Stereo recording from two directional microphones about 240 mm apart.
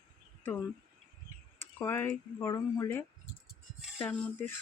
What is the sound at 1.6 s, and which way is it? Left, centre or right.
Speech, centre.